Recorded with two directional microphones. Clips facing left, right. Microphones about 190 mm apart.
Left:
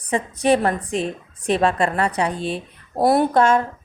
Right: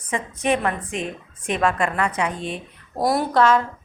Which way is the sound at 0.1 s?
35° left (ahead or behind).